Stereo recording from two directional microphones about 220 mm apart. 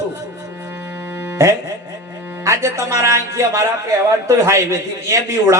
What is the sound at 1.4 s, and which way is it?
A man's voice, 10° right (ahead or behind).